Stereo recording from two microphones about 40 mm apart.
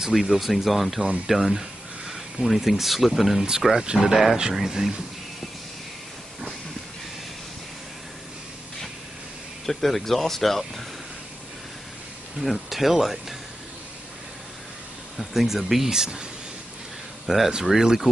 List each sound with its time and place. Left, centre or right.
0.0 s speech: centre
3.3 s speech: centre
9.7 s speech: centre
12.4 s speech: centre
15.3 s speech: centre
17.3 s speech: centre